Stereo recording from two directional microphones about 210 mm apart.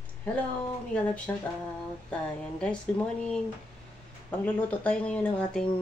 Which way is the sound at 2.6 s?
5° left (ahead or behind).